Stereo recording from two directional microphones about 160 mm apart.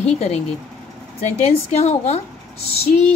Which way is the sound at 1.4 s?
45° left (ahead or behind).